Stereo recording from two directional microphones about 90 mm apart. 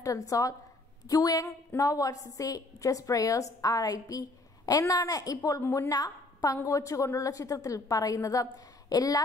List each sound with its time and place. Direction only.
0.0 s a woman's voice: 40° left (ahead or behind)